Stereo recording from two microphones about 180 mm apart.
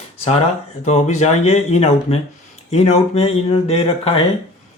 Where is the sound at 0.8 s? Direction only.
40° left (ahead or behind).